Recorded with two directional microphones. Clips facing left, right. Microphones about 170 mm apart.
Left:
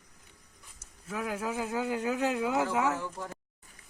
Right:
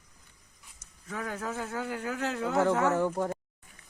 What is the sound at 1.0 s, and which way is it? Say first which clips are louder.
Speech: left 2 dB; 5° left (ahead or behind).